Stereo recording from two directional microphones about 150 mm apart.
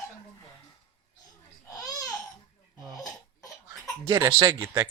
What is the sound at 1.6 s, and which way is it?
Babbling, 25° left (ahead or behind).